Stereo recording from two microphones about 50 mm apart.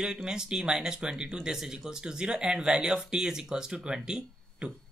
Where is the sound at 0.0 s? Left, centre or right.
Centre.